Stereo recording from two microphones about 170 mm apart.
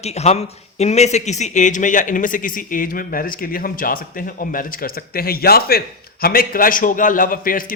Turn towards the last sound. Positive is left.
turn(degrees=55)  # may be behind; listen again after turning